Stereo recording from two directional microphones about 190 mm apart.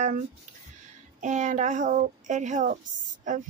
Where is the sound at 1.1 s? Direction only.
40° right (ahead or behind).